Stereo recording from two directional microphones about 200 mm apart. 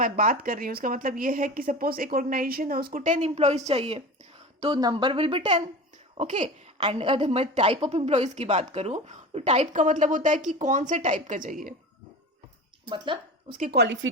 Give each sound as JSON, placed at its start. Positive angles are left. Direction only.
{"t": 0.0, "sound": "a woman's voice", "side_deg": -45}
{"t": 12.8, "sound": "a woman's voice", "side_deg": -25}
{"t": 13.6, "sound": "a woman's voice", "side_deg": -55}